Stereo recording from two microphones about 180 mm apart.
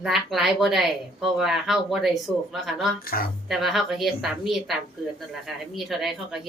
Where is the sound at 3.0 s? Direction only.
55° left (ahead or behind).